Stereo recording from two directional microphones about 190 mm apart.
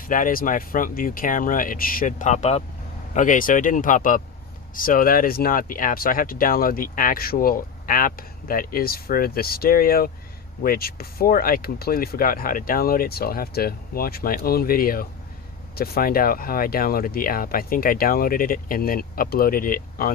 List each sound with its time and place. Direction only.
0.0 s speech: 45° left (ahead or behind)